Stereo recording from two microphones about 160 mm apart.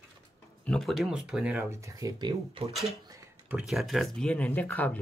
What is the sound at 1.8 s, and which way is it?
Speech, 20° right (ahead or behind).